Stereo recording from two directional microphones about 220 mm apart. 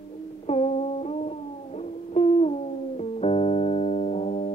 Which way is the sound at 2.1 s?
30° left (ahead or behind).